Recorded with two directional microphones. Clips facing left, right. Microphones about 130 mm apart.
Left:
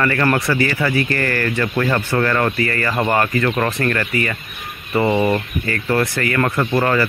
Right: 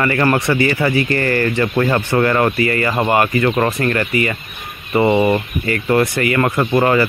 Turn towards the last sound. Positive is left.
turn(degrees=-20)  # may be behind; listen again after turning